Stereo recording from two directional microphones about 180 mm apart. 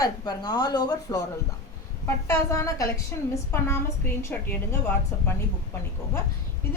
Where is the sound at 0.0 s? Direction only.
20° left (ahead or behind).